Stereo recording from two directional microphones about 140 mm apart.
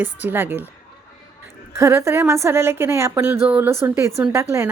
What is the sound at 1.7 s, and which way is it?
A woman's voice, 20° right (ahead or behind).